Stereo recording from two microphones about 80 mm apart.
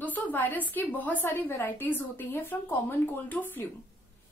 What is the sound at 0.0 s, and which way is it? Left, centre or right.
A woman's voice, left.